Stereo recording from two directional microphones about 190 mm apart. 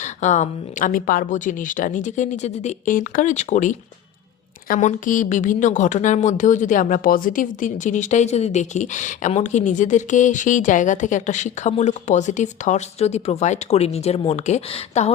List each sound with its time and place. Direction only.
0.0 s a woman's voice: 40° left (ahead or behind)